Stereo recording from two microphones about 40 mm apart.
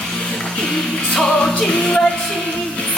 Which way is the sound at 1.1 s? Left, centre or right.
Centre.